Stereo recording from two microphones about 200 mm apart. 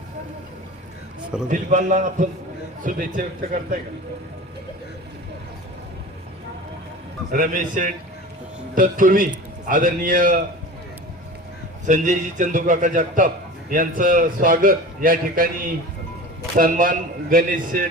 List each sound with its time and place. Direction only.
1.5 s a man's voice: 40° right (ahead or behind)
7.3 s a man's voice: 40° right (ahead or behind)
11.9 s a man's voice: 40° right (ahead or behind)